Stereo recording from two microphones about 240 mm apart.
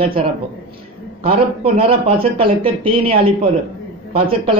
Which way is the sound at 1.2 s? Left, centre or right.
Right.